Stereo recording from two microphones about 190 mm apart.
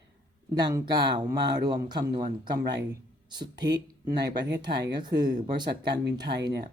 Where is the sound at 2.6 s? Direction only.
60° right (ahead or behind).